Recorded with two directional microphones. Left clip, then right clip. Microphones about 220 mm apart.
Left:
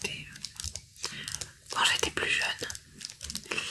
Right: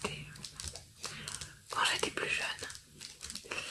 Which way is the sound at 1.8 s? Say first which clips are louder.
Left 5 dB; 50° left (ahead or behind).